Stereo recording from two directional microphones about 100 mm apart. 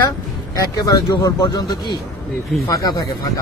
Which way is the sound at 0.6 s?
40° left (ahead or behind).